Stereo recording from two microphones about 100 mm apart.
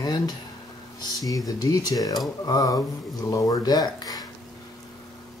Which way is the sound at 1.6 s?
40° left (ahead or behind).